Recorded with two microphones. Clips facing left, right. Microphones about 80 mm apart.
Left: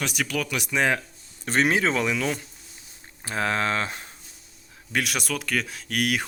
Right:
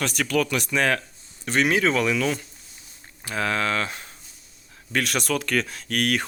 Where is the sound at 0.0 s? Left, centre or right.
Centre.